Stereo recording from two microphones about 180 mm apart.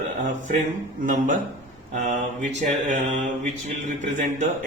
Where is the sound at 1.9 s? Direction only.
45° right (ahead or behind).